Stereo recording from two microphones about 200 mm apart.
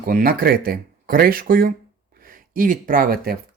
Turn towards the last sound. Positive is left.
turn(degrees=-45)  # may be behind; listen again after turning